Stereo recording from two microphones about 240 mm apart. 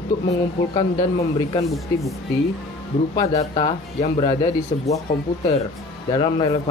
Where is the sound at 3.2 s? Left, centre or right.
Centre.